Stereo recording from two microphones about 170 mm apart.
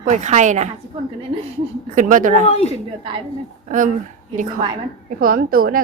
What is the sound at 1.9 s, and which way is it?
Speech, 50° right (ahead or behind).